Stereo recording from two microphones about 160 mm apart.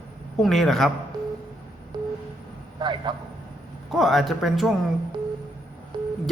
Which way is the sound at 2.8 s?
30° right (ahead or behind).